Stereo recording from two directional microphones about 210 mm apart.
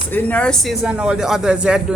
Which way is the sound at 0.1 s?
10° left (ahead or behind).